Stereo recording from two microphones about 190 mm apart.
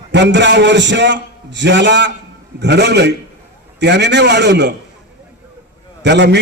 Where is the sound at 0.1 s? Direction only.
65° right (ahead or behind).